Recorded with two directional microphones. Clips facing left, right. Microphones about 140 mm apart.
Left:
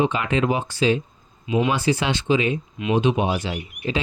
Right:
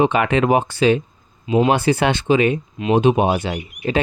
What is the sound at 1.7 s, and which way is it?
Speech, 55° right (ahead or behind).